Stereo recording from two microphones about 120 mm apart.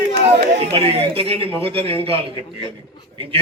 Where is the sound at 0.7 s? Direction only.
50° right (ahead or behind).